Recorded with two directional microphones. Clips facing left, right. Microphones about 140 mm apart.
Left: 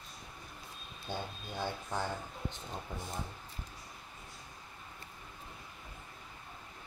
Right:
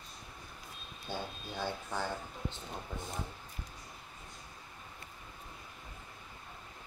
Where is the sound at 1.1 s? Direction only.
15° left (ahead or behind).